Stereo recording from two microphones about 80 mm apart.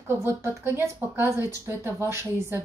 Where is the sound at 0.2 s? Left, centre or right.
Right.